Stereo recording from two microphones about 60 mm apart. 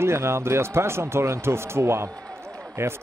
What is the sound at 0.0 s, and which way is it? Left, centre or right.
Speech, right.